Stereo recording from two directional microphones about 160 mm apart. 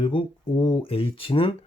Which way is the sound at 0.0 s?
30° left (ahead or behind).